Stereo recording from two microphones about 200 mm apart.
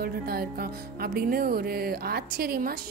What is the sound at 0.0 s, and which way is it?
Speech, 50° right (ahead or behind).